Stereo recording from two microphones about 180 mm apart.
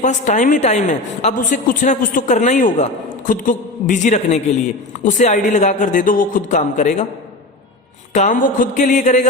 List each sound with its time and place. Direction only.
0.0 s a woman's voice: 40° left (ahead or behind)
8.1 s a woman's voice: 45° left (ahead or behind)